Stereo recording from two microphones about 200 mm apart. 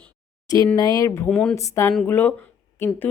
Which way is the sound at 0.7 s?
20° left (ahead or behind).